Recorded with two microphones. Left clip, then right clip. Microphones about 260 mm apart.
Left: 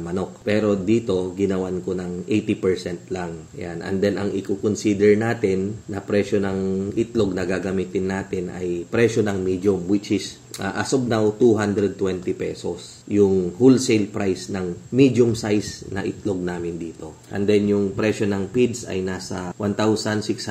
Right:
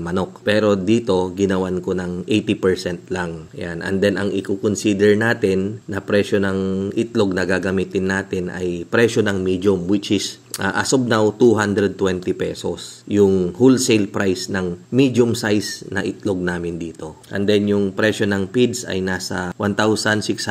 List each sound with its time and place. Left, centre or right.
0.0 s speech: right